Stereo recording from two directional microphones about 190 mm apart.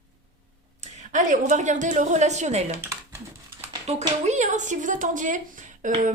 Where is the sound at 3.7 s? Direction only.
25° right (ahead or behind).